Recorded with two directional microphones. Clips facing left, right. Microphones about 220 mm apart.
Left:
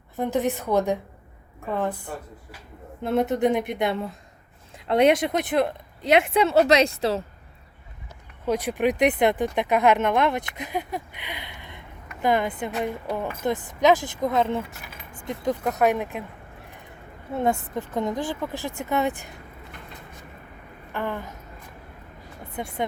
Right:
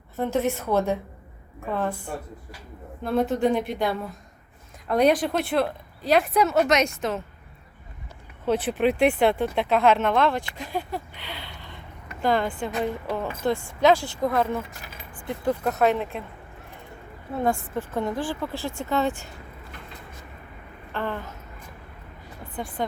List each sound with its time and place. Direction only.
0.2 s speech: 15° left (ahead or behind)
3.0 s speech: 20° left (ahead or behind)
8.4 s speech: 15° left (ahead or behind)
17.3 s speech: 20° left (ahead or behind)
20.9 s speech: 15° left (ahead or behind)
22.5 s speech: 25° left (ahead or behind)